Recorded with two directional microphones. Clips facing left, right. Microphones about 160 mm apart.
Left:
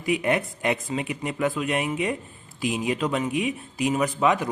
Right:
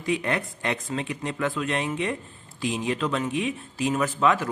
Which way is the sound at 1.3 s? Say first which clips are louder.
Left 2 dB; 15° left (ahead or behind).